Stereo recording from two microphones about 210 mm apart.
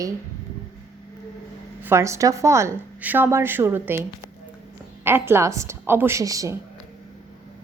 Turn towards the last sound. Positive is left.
turn(degrees=-15)  # may be behind; listen again after turning